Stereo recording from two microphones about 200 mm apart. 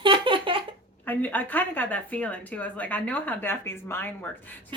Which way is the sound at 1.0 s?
10° left (ahead or behind).